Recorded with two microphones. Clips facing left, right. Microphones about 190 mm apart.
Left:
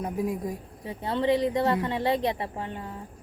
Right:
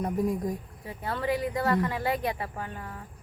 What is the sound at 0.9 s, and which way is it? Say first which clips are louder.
A woman's voice: left 5 dB; 25° left (ahead or behind).